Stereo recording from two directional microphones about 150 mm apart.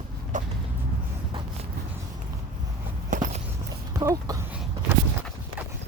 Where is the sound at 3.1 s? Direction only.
55° right (ahead or behind).